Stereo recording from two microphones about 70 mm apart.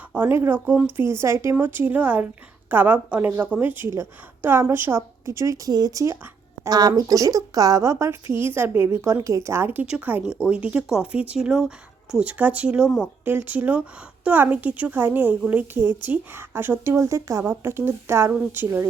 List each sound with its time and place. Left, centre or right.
0.1 s speech: right
0.6 s speech: centre
0.9 s speech: right
1.5 s a woman's voice: right
6.7 s a woman's voice: right
10.2 s speech: centre
12.2 s speech: centre
13.2 s speech: right
17.4 s speech: right